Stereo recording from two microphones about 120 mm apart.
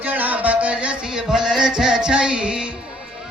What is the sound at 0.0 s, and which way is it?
Music, 15° right (ahead or behind).